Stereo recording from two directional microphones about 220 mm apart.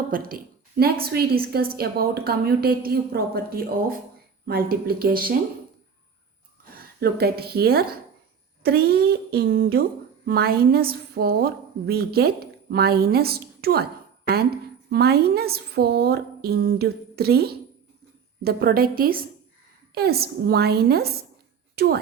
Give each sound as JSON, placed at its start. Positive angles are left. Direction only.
{"t": 0.1, "sound": "a woman's voice", "side_deg": -40}
{"t": 7.0, "sound": "a woman's voice", "side_deg": -45}
{"t": 14.8, "sound": "a woman's voice", "side_deg": -45}